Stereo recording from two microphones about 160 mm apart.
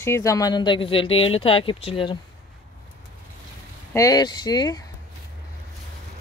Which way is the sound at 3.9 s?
20° left (ahead or behind).